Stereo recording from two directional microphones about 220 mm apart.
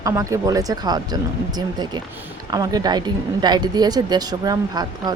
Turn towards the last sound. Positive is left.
turn(degrees=-20)  # may be behind; listen again after turning